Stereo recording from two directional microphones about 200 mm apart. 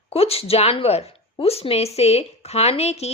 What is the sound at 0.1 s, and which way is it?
A woman's voice, 30° left (ahead or behind).